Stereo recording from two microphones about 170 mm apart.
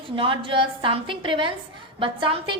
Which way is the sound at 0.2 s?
30° right (ahead or behind).